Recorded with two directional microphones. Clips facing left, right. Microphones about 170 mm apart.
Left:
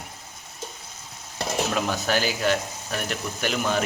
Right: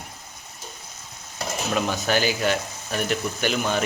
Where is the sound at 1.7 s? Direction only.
Centre (ahead or behind).